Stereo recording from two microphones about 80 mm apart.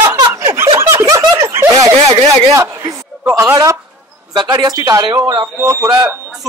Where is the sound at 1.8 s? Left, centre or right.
Right.